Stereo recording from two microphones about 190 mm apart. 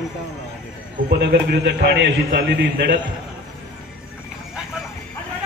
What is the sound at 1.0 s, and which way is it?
A man's voice, 60° right (ahead or behind).